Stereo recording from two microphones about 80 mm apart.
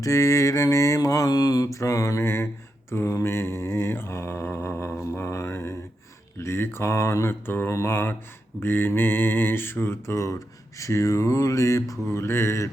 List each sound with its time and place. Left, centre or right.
0.0 s mantra: left